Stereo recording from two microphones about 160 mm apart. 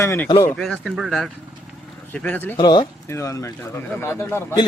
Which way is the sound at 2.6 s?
25° left (ahead or behind).